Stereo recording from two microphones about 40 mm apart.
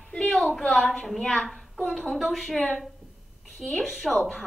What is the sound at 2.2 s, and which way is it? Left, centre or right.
Speech, centre.